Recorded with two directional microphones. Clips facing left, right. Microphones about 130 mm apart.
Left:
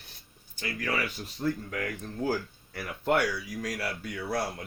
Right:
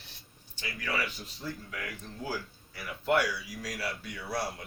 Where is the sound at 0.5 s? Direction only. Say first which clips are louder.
Left 3 dB; 50° left (ahead or behind).